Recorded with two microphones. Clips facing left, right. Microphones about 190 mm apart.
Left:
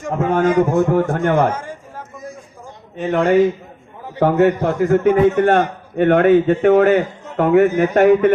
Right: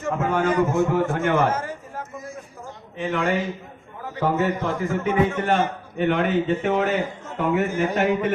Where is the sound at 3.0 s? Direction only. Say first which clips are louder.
Left 7 dB; 40° left (ahead or behind).